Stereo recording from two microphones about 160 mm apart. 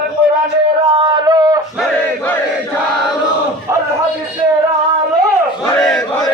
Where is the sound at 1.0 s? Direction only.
30° right (ahead or behind).